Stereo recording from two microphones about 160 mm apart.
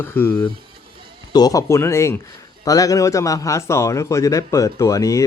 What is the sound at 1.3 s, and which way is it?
A man's voice, 25° left (ahead or behind).